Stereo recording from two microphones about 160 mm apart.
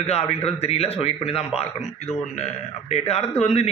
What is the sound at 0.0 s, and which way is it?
A man's voice, 40° left (ahead or behind).